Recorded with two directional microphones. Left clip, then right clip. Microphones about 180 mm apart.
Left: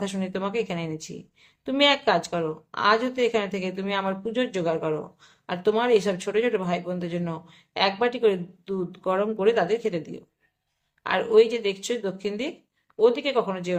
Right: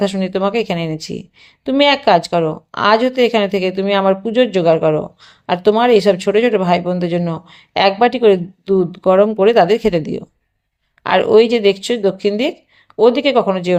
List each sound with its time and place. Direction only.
0.0 s a woman's voice: 30° right (ahead or behind)